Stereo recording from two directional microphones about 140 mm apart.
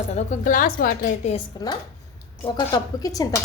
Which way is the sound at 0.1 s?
55° left (ahead or behind).